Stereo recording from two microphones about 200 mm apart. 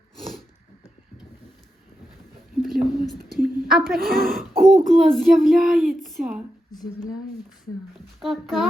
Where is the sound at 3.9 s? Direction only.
50° right (ahead or behind).